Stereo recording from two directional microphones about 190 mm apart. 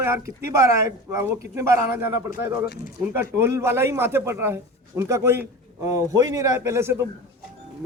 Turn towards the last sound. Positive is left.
turn(degrees=-15)  # may be behind; listen again after turning